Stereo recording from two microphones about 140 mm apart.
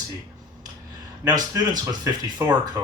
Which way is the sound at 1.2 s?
30° right (ahead or behind).